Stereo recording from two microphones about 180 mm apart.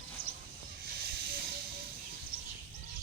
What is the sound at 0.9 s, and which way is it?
Hiss, 60° right (ahead or behind).